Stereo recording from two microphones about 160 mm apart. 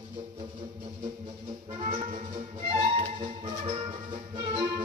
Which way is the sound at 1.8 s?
50° right (ahead or behind).